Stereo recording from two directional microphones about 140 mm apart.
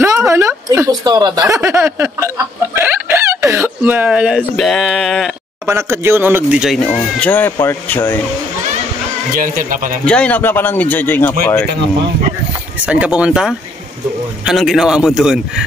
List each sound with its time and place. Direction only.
0.0 s a sound: 20° right (ahead or behind)
1.6 s chicken: 15° right (ahead or behind)
5.7 s speech: 20° right (ahead or behind)
7.2 s speech: 10° left (ahead or behind)
9.3 s speech: 90° right
10.0 s speech: 10° left (ahead or behind)
12.8 s a man's voice: 10° right (ahead or behind)